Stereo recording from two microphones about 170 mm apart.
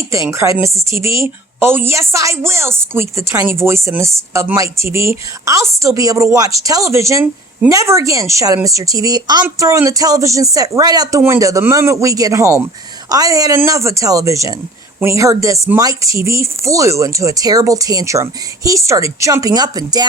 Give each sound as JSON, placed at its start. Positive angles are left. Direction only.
{"t": 0.1, "sound": "a woman's voice", "side_deg": -15}